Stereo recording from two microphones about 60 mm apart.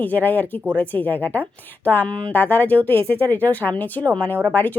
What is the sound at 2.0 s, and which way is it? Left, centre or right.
Speech, left.